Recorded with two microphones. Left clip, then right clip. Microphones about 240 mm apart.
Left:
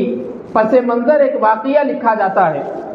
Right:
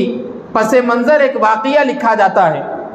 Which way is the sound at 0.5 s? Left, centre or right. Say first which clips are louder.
Right 1 dB; right.